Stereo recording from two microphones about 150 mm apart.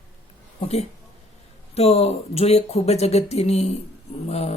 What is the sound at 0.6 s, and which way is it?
Speech, 45° left (ahead or behind).